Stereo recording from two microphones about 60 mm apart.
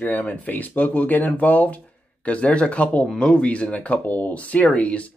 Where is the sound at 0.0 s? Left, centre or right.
Left.